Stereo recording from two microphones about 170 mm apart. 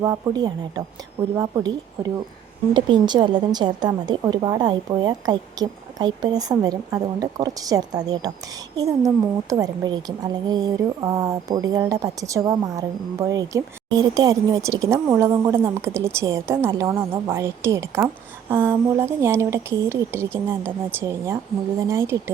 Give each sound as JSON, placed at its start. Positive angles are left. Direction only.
{"t": 0.0, "sound": "a woman's voice", "side_deg": -20}
{"t": 2.7, "sound": "a woman's voice", "side_deg": -25}